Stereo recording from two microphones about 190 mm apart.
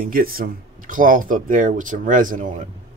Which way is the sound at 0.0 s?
50° right (ahead or behind).